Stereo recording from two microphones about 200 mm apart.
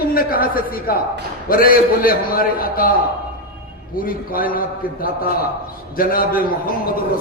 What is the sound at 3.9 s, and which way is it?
A man's voice, 45° left (ahead or behind).